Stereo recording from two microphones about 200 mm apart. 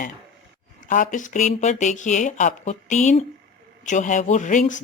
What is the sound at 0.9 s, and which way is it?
Speech, 40° left (ahead or behind).